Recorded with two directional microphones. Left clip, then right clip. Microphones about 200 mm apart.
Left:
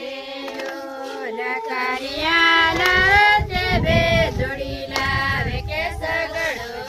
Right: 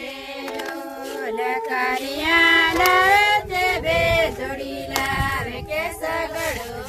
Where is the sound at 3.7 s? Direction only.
65° right (ahead or behind).